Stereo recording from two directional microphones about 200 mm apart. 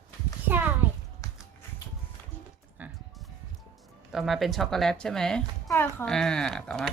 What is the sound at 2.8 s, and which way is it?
Music, 10° right (ahead or behind).